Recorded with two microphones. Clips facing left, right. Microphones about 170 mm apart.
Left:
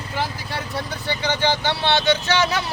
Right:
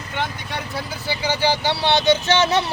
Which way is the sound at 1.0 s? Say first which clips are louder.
Right 1 dB; 10° right (ahead or behind).